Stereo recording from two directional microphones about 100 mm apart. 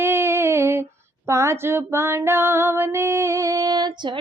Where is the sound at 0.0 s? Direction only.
25° right (ahead or behind).